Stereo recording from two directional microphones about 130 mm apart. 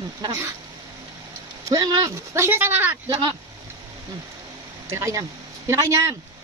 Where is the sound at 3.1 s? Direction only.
40° right (ahead or behind).